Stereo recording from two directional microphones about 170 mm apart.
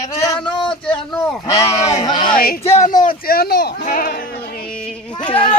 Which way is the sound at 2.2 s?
55° left (ahead or behind).